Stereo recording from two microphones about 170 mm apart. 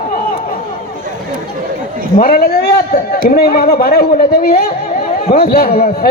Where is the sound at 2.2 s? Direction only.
65° left (ahead or behind).